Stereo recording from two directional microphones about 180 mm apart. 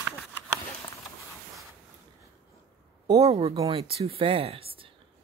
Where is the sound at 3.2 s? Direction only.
35° right (ahead or behind).